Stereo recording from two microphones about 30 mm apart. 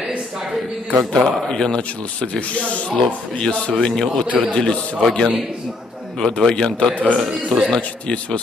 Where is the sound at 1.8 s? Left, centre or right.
Left.